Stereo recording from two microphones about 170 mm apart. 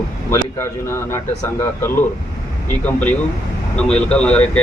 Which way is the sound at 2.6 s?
10° left (ahead or behind).